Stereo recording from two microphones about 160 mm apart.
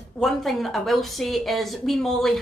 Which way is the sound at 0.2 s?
Centre (ahead or behind).